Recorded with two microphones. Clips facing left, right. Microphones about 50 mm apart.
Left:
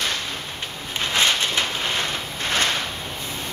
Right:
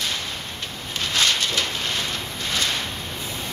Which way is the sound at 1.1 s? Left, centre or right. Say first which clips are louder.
Left 1 dB; left.